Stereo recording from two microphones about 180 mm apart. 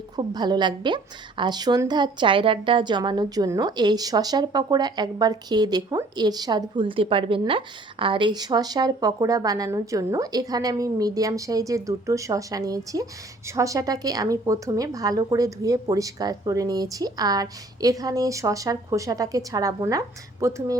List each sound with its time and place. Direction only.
0.2 s a woman's voice: 25° right (ahead or behind)